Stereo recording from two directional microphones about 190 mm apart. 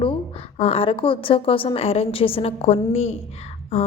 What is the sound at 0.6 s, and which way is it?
A woman's voice, 30° left (ahead or behind).